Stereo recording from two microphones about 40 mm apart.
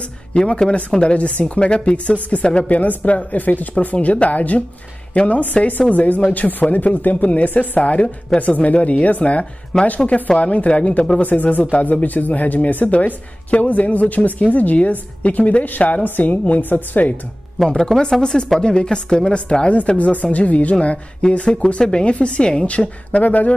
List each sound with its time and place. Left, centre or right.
0.3 s a woman's voice: left
2.7 s a woman's voice: left
7.2 s a woman's voice: left
11.1 s speech: left
12.9 s a woman's voice: left
17.9 s speech: centre
18.2 s a woman's voice: centre; by 23.5 s left